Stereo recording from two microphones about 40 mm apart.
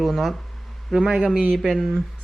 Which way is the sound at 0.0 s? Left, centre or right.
Centre.